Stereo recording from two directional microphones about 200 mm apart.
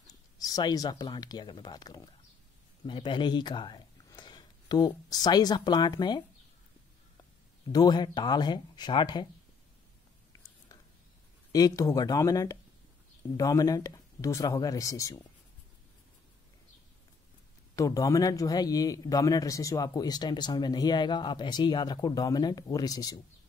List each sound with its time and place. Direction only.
0.4 s speech: 20° left (ahead or behind)
7.7 s speech: 20° left (ahead or behind)
11.5 s speech: 15° left (ahead or behind)
17.7 s speech: 15° left (ahead or behind)